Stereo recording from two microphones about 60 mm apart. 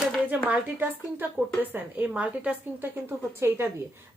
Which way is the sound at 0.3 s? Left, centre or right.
Right.